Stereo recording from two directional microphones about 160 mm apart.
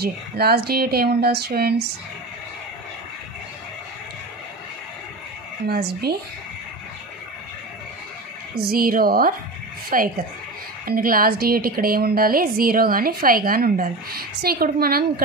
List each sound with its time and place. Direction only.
0.0 s speech: 80° right
5.7 s speech: 85° right
8.5 s a woman's voice: 70° right (ahead or behind)